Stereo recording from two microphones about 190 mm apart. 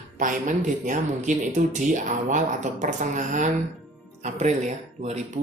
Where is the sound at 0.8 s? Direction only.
40° right (ahead or behind).